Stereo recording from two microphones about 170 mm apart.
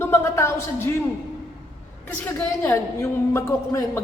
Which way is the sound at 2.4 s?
15° left (ahead or behind).